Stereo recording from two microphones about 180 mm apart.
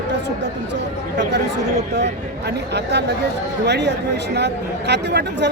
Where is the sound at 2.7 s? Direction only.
70° right (ahead or behind).